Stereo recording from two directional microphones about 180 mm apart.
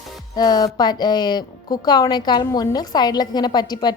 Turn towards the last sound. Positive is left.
turn(degrees=25)  # may be behind; listen again after turning